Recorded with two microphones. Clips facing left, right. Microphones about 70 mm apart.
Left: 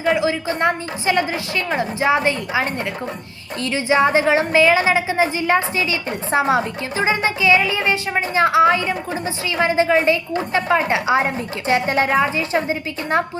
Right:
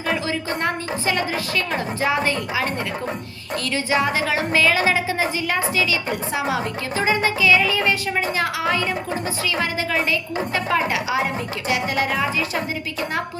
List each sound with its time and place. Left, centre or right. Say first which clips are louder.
0.0 s a woman's voice: left 5 dB; centre
3.7 s a woman's voice: left 5 dB; left